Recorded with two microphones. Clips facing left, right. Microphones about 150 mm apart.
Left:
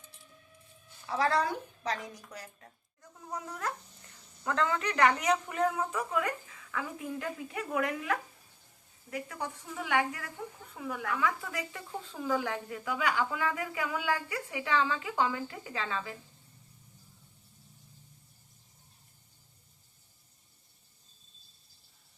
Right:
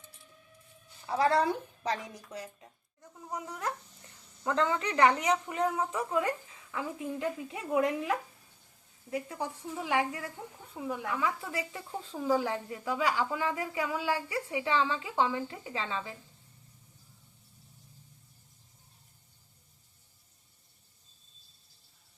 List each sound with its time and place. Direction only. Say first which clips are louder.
1.0 s a woman's voice: right 2 dB; 30° right (ahead or behind)